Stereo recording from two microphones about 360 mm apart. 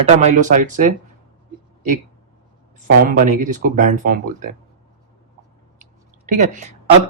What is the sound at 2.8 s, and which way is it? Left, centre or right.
Speech, right.